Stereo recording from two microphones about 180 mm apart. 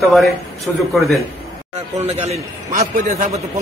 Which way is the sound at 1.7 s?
35° right (ahead or behind).